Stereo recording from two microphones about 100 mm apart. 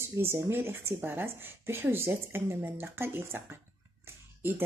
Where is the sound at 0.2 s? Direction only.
25° right (ahead or behind).